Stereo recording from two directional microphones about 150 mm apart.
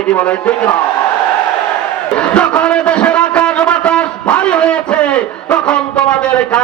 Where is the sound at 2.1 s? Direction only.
5° left (ahead or behind).